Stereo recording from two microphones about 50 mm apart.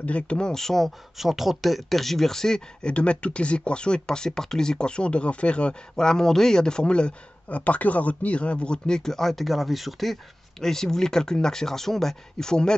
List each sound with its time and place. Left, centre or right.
0.0 s speech: left
7.4 s speech: left; by 12.7 s centre